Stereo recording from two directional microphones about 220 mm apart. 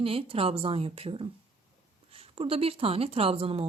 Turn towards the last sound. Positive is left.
turn(degrees=-25)  # may be behind; listen again after turning